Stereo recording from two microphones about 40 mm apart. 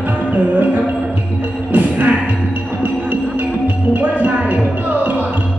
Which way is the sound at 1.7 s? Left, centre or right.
Right.